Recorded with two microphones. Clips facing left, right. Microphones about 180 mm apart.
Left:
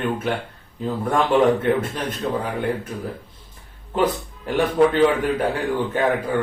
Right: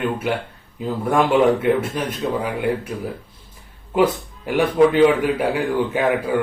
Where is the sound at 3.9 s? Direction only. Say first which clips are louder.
Right 3 dB; 10° right (ahead or behind).